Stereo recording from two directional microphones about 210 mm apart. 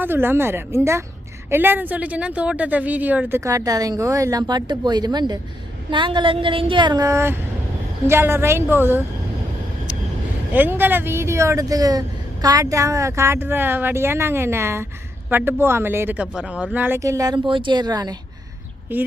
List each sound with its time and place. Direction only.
0.0 s a woman's voice: 10° right (ahead or behind)
10.5 s speech: 10° right (ahead or behind)